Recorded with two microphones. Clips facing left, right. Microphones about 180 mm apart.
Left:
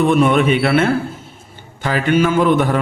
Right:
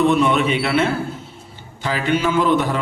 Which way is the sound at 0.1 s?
50° left (ahead or behind).